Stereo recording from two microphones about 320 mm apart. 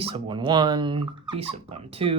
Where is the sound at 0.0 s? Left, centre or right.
Centre.